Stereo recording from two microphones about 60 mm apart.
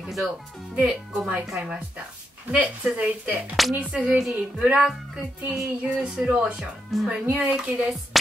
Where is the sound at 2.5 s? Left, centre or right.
Right.